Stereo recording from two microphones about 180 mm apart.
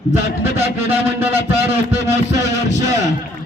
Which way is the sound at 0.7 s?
10° right (ahead or behind).